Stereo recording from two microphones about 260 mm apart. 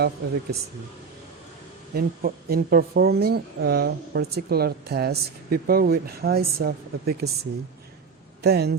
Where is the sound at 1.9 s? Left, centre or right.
Right.